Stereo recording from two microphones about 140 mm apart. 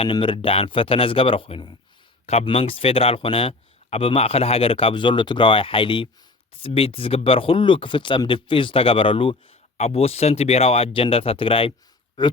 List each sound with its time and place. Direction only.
0.0 s speech: 35° left (ahead or behind)
9.7 s speech: 50° left (ahead or behind)